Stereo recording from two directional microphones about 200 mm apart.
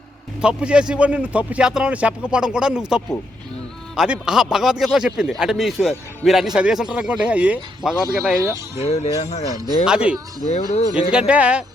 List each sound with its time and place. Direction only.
0.4 s speech: 5° right (ahead or behind)
8.8 s speech: 30° left (ahead or behind)
9.5 s speech: 20° right (ahead or behind)
9.8 s speech: 5° right (ahead or behind)
10.5 s speech: 35° left (ahead or behind)
10.9 s speech: 5° right (ahead or behind)